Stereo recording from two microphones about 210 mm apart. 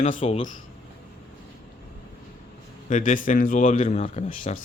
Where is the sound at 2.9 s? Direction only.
40° left (ahead or behind).